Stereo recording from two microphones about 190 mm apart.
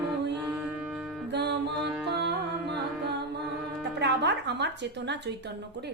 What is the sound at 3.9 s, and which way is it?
Music, 65° right (ahead or behind).